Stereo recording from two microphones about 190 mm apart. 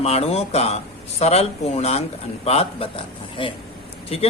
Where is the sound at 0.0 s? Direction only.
35° left (ahead or behind).